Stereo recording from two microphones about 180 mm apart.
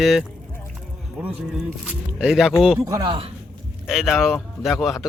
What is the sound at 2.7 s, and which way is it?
Speech, 20° right (ahead or behind).